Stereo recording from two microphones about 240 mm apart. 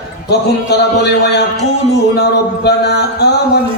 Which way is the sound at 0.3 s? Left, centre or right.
Left.